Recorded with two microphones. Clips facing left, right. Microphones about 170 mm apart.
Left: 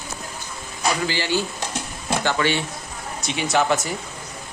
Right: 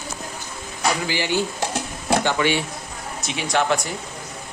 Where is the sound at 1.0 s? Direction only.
15° right (ahead or behind).